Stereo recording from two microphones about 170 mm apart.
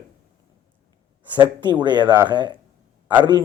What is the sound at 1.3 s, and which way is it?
Speech, 25° right (ahead or behind).